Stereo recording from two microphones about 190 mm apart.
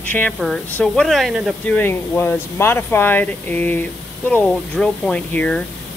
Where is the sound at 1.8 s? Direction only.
10° left (ahead or behind).